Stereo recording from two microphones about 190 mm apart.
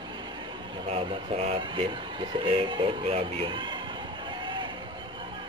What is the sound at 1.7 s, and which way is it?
Speech, 25° right (ahead or behind).